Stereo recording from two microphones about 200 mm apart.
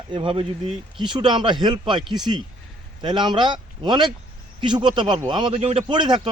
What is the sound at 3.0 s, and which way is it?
A man's voice, 25° right (ahead or behind).